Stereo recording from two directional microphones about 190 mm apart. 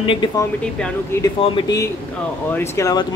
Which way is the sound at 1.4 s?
20° left (ahead or behind).